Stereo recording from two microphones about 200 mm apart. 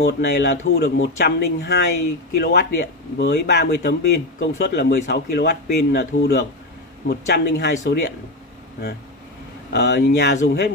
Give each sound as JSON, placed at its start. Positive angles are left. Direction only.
{"t": 0.0, "sound": "a man's voice", "side_deg": 60}
{"t": 9.7, "sound": "a man's voice", "side_deg": 60}